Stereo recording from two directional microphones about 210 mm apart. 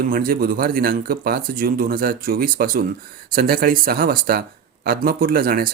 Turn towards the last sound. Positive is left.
turn(degrees=-45)  # may be behind; listen again after turning